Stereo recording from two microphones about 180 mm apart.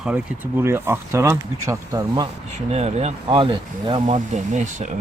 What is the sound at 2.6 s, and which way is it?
Speech, 40° right (ahead or behind).